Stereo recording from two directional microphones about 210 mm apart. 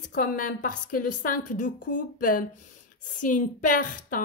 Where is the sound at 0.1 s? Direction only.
40° left (ahead or behind).